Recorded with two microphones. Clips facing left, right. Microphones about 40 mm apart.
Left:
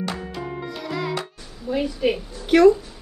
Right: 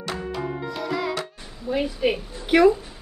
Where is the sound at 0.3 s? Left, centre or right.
Centre.